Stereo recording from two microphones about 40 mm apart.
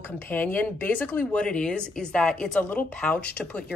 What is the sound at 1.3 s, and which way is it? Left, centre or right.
Speech, left.